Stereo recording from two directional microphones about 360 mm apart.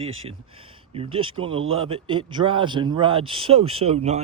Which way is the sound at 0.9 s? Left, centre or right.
Centre.